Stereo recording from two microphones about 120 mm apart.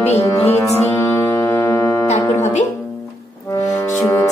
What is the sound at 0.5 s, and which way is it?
Music, 60° left (ahead or behind).